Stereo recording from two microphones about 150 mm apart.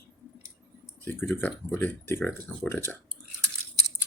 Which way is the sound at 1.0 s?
15° left (ahead or behind).